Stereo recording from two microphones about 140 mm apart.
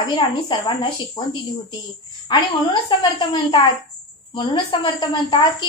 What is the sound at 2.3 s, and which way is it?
A woman's voice, 35° left (ahead or behind).